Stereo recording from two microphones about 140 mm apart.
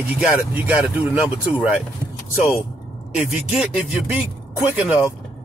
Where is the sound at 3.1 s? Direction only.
5° right (ahead or behind).